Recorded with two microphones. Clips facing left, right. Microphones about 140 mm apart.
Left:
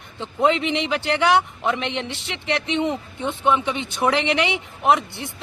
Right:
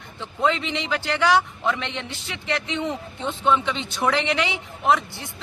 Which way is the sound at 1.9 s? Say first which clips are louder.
Left 4 dB; 65° left (ahead or behind).